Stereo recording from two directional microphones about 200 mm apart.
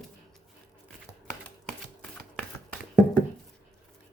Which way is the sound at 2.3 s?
5° left (ahead or behind).